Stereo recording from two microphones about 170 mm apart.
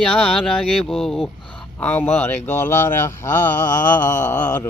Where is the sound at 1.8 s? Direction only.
10° left (ahead or behind).